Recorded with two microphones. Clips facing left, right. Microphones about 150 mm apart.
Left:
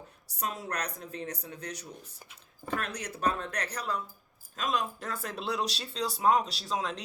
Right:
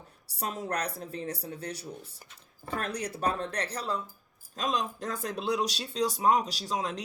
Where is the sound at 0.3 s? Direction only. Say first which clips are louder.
Right 2 dB; 35° right (ahead or behind).